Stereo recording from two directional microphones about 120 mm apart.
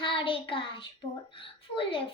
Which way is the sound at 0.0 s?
45° left (ahead or behind).